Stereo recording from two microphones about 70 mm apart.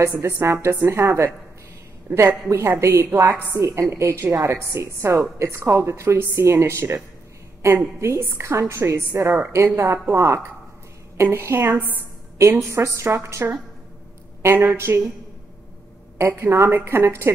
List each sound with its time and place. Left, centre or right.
0.0 s a woman's voice: right
2.4 s a woman's voice: right
8.0 s a woman's voice: right
16.2 s a woman's voice: right